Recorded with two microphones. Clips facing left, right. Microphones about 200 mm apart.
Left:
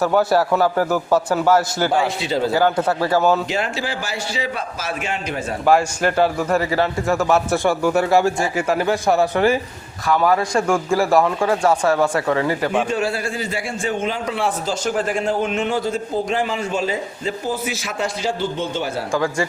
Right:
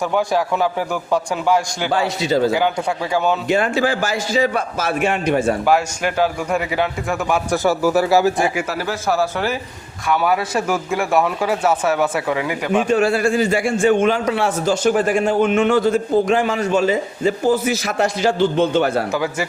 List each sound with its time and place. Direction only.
0.0 s speech: 5° left (ahead or behind)
1.5 s a man's voice: 15° right (ahead or behind)
3.5 s a man's voice: 50° right (ahead or behind)
5.6 s speech: 5° right (ahead or behind)
10.1 s speech: 5° right (ahead or behind)
12.9 s a man's voice: 60° right (ahead or behind)
13.6 s a man's voice: 50° right (ahead or behind)
13.8 s a man's voice: 75° right (ahead or behind)
19.1 s a man's voice: 5° right (ahead or behind)